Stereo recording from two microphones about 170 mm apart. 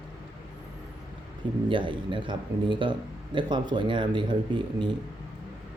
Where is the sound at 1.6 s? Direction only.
30° right (ahead or behind).